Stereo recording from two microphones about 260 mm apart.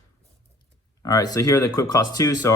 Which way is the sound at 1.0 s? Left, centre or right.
Centre.